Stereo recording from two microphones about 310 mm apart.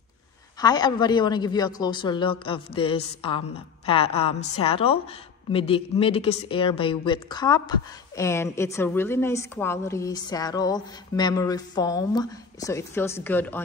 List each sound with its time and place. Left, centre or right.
0.6 s a woman's voice: centre